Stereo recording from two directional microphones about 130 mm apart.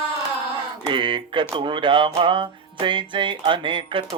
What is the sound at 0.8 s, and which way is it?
Mantra, 40° right (ahead or behind).